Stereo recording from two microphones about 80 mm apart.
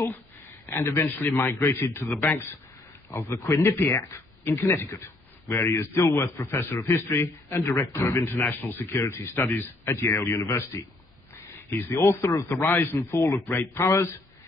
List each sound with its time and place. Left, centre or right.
0.7 s a man's voice: left
3.1 s speech: left
11.7 s speech: left